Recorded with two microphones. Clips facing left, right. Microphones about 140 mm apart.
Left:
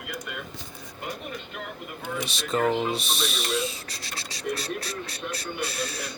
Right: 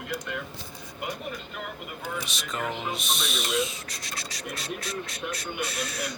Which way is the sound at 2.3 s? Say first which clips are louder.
Left 8 dB; 30° left (ahead or behind).